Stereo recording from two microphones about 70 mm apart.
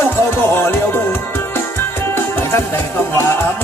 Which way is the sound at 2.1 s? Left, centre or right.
Left.